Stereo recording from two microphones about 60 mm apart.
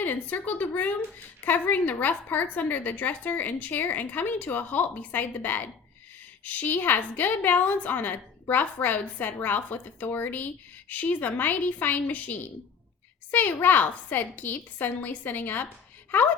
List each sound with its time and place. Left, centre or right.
0.0 s a woman's voice: left